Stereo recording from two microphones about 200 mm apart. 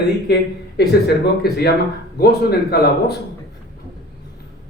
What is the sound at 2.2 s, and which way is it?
Speech, 50° left (ahead or behind).